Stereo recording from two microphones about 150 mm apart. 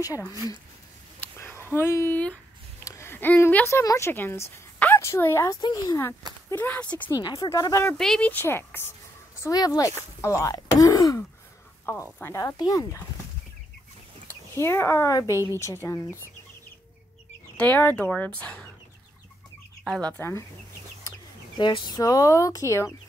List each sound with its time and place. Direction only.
1.2 s a sound: 15° left (ahead or behind)
1.8 s a woman's voice: 15° left (ahead or behind)
6.5 s speech: 10° left (ahead or behind)
7.1 s speech: 25° left (ahead or behind)
8.0 s speech: 5° left (ahead or behind); by 13.0 s 25° left (ahead or behind)
14.5 s speech: 15° left (ahead or behind)
17.6 s speech: 10° left (ahead or behind)
19.8 s speech: 5° left (ahead or behind)
21.5 s speech: 30° left (ahead or behind)